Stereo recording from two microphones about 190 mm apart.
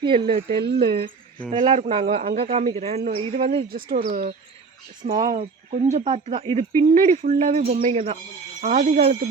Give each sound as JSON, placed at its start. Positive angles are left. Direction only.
{"t": 0.0, "sound": "a man's voice", "side_deg": -25}
{"t": 0.4, "sound": "speech", "side_deg": -55}
{"t": 1.5, "sound": "a man's voice", "side_deg": -30}
{"t": 3.7, "sound": "speech", "side_deg": -50}
{"t": 5.0, "sound": "a man's voice", "side_deg": -30}